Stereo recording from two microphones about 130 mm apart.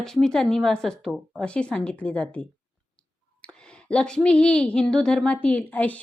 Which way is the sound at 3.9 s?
5° left (ahead or behind).